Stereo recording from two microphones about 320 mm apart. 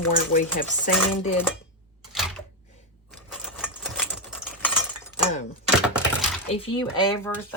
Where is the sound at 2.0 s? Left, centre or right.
Centre.